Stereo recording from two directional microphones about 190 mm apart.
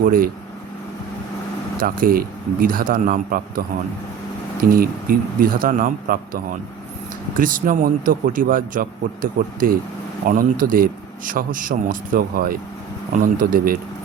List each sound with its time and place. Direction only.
1.8 s a man's voice: 50° right (ahead or behind)
4.7 s a man's voice: 50° right (ahead or behind)